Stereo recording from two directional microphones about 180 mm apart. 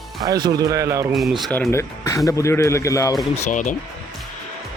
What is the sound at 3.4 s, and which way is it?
Speech, 45° left (ahead or behind).